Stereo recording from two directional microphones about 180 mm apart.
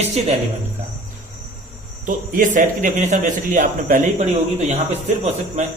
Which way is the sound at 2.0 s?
50° right (ahead or behind).